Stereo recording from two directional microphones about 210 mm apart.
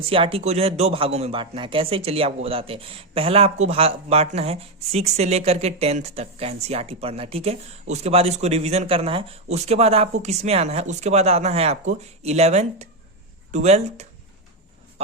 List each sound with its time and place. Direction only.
0.0 s speech: 25° right (ahead or behind)